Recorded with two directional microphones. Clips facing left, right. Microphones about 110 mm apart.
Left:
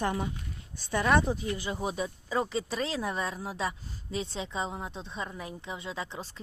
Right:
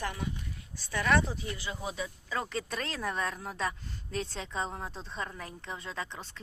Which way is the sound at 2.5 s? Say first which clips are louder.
Left 4 dB; 5° left (ahead or behind).